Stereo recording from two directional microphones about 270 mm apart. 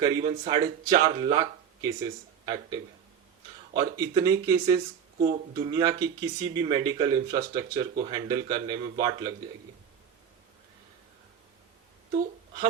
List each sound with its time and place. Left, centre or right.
0.0 s speech: centre